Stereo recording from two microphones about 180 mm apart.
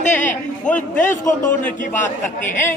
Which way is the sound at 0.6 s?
10° left (ahead or behind).